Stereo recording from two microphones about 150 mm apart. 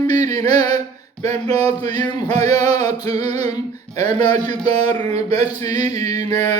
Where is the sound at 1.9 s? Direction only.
25° left (ahead or behind).